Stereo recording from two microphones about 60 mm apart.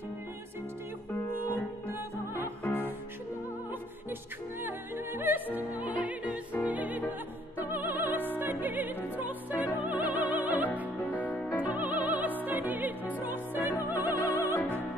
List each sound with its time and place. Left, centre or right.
1.9 s music: right
2.6 s music: left
4.6 s music: right
5.7 s opera: right
7.1 s music: right
8.4 s opera: right
11.1 s music: left
11.6 s music: right